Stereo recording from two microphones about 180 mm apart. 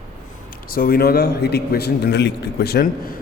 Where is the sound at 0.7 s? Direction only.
55° left (ahead or behind).